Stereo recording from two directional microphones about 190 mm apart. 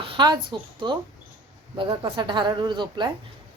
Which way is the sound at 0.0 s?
25° right (ahead or behind).